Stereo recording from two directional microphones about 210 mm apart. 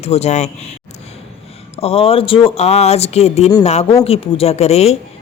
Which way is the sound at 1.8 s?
25° left (ahead or behind).